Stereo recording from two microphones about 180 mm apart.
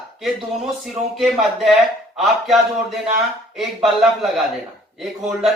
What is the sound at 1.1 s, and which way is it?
Speech, centre (ahead or behind).